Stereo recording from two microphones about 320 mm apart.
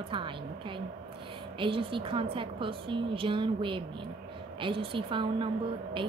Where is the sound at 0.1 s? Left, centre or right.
Centre.